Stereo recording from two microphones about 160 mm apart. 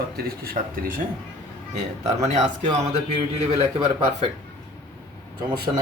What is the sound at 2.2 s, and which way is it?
Speech, 45° right (ahead or behind).